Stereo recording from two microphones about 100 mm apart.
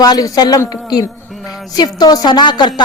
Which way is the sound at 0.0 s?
40° left (ahead or behind).